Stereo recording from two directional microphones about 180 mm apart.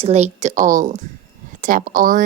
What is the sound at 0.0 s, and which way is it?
A woman's voice, 35° right (ahead or behind).